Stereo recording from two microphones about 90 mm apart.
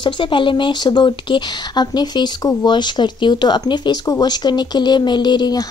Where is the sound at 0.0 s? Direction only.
65° left (ahead or behind).